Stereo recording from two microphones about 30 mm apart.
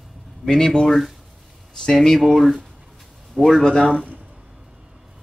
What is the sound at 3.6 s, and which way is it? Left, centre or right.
Speech, centre.